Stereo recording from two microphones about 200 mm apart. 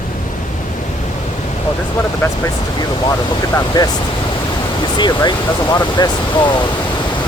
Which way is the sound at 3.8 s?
20° left (ahead or behind).